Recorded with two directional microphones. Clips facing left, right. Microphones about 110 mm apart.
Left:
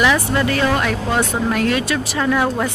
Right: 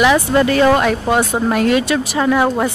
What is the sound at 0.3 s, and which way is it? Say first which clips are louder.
Speech: right 6 dB; 30° right (ahead or behind).